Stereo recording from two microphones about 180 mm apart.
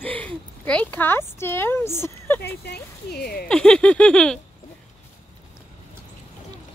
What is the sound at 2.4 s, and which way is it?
Speech, 65° left (ahead or behind).